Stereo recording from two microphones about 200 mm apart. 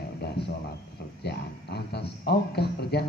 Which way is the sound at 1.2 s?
55° left (ahead or behind).